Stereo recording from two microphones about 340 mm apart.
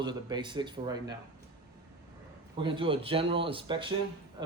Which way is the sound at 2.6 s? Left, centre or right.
Centre.